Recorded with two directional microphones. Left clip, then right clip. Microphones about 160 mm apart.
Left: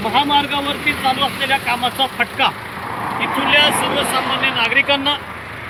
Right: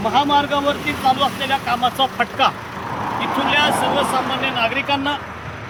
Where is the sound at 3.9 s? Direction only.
80° right.